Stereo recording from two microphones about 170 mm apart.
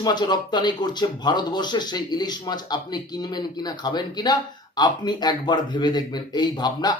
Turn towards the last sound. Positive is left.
turn(degrees=25)  # may be behind; listen again after turning